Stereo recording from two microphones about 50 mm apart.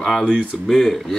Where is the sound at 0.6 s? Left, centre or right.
Centre.